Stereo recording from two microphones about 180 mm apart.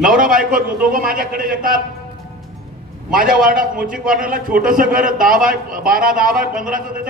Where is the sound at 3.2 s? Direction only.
50° right (ahead or behind).